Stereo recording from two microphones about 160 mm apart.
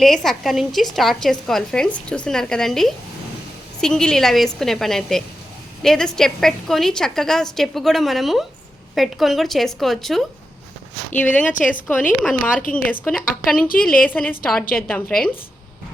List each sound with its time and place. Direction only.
0.0 s a woman's voice: centre (ahead or behind)
13.4 s a woman's voice: 65° left (ahead or behind)
14.0 s a woman's voice: 10° left (ahead or behind)
14.6 s a woman's voice: 65° left (ahead or behind)